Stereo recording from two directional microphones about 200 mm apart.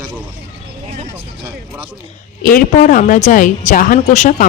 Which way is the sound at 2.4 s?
40° left (ahead or behind).